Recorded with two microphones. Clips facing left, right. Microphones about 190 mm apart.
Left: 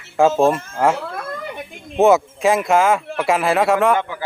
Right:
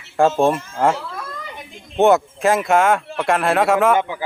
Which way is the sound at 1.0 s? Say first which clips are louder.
Left 4 dB; 55° left (ahead or behind).